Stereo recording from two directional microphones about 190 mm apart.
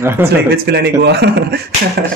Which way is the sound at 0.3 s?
60° right (ahead or behind).